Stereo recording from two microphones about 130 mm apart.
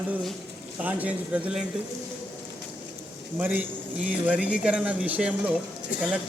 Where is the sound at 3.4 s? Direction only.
10° right (ahead or behind).